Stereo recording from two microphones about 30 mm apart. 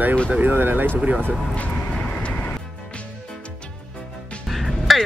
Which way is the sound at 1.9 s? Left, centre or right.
Left.